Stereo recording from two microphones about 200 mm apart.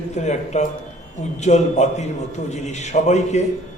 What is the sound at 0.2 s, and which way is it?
A man's voice, 35° left (ahead or behind).